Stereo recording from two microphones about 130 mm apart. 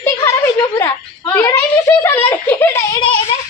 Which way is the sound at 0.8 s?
20° left (ahead or behind).